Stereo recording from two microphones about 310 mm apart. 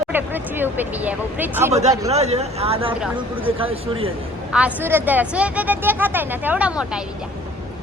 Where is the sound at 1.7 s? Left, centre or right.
Right.